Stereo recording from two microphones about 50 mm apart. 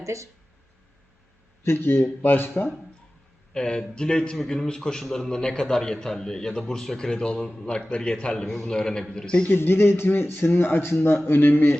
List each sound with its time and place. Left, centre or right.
0.0 s speech: right
1.6 s speech: left
2.2 s speech: left
3.5 s a man's voice: centre
9.5 s speech: left